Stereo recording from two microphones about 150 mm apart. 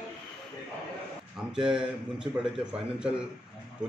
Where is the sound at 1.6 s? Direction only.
5° right (ahead or behind).